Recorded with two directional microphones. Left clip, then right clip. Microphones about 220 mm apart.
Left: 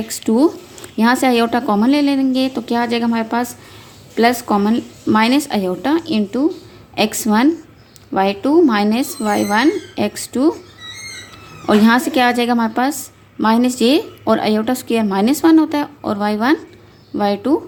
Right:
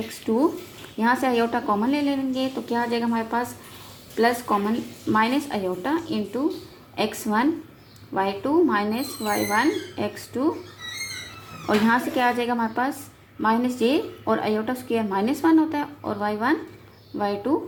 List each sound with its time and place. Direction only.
0.3 s a woman's voice: 35° left (ahead or behind)
11.6 s a woman's voice: 35° left (ahead or behind)